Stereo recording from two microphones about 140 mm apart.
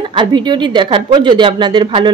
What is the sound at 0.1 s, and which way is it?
Speech, 35° right (ahead or behind).